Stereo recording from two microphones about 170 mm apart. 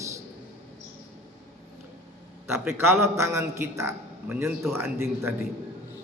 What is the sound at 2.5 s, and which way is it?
A man's voice, 15° right (ahead or behind).